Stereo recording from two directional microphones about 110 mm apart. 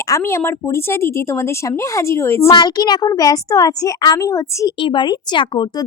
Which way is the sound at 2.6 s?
40° left (ahead or behind).